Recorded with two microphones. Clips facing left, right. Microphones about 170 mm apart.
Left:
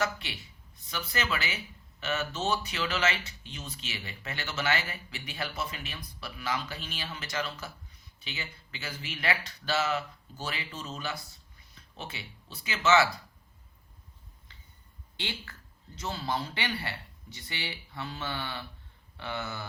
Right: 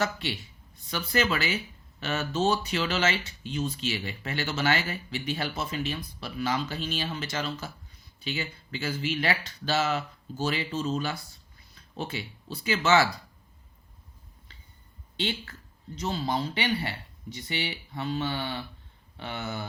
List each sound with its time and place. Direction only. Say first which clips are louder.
0.9 s speech: right 6 dB; 30° right (ahead or behind)
12.5 s speech: right 2 dB; 35° right (ahead or behind)
16.0 s speech: right 4 dB; 20° right (ahead or behind)